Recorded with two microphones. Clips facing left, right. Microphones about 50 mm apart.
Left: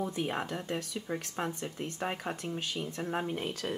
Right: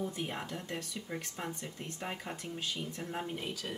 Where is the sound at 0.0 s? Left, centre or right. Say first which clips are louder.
Left 4 dB; left.